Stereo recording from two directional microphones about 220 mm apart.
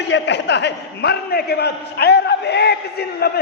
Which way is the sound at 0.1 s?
50° left (ahead or behind).